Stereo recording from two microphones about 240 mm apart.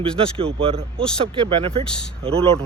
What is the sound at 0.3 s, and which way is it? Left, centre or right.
Speech, right.